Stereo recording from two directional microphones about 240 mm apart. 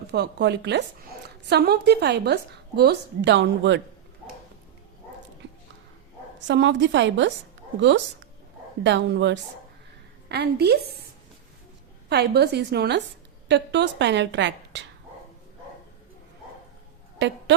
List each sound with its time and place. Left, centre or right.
0.1 s a woman's voice: right
6.5 s a woman's voice: right
12.0 s a woman's voice: right
17.2 s a sound: right